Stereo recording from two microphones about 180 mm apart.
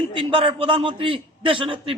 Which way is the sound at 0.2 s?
30° right (ahead or behind).